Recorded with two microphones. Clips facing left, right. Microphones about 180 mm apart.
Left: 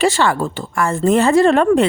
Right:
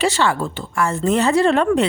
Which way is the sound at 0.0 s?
50° left (ahead or behind).